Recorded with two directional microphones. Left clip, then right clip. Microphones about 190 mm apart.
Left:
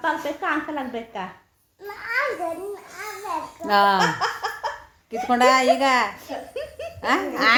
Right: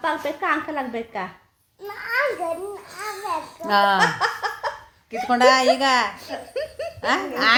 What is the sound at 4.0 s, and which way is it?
Laughter, 45° right (ahead or behind).